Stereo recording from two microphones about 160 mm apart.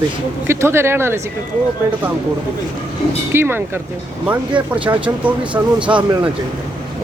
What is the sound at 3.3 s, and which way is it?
Speech, 15° right (ahead or behind).